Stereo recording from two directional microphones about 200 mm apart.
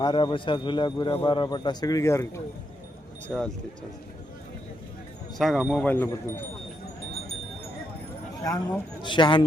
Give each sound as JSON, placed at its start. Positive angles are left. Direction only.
{"t": 0.0, "sound": "a man's voice", "side_deg": 20}
{"t": 3.2, "sound": "speech", "side_deg": 5}
{"t": 5.4, "sound": "speech", "side_deg": 0}
{"t": 8.4, "sound": "a man's voice", "side_deg": 15}